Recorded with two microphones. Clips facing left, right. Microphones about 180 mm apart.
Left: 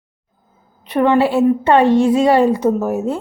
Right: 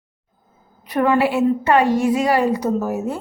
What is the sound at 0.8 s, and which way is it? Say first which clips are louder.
A woman's voice: left 3 dB; 25° left (ahead or behind).